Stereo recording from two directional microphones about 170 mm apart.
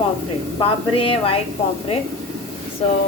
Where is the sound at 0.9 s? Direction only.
35° left (ahead or behind).